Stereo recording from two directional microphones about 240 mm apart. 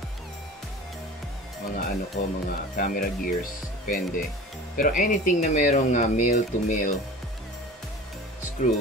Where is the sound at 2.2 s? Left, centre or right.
Left.